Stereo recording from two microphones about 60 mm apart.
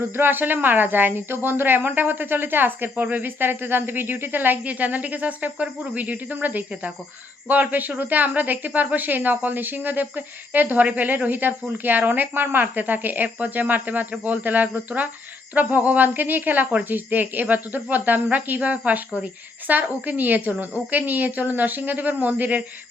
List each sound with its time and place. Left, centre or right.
0.2 s speech: right